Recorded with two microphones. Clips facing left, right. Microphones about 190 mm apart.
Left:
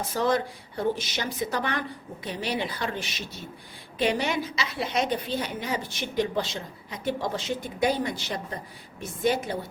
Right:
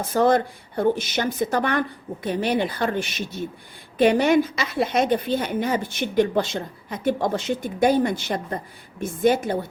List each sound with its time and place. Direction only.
0.1 s a woman's voice: 50° right (ahead or behind)